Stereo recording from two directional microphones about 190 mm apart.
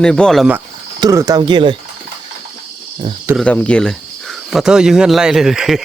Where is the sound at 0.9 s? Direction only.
20° right (ahead or behind).